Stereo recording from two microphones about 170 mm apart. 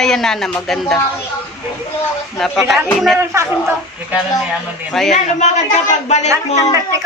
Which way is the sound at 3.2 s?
15° right (ahead or behind).